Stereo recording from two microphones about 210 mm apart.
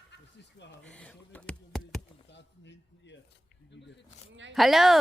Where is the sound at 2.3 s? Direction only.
55° left (ahead or behind).